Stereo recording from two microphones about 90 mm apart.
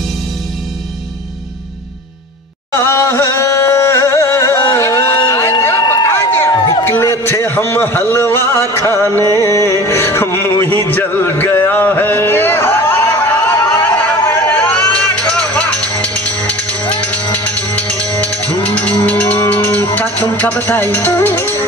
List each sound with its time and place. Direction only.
2.7 s a sound: 25° left (ahead or behind)
6.8 s music: 25° left (ahead or behind)
7.1 s a man's voice: 30° left (ahead or behind)
11.6 s a sound: 20° left (ahead or behind)
16.3 s music: 15° left (ahead or behind)
20.3 s speech: 15° left (ahead or behind)
20.9 s music: 20° left (ahead or behind)